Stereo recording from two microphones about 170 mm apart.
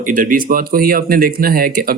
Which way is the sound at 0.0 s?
55° right (ahead or behind).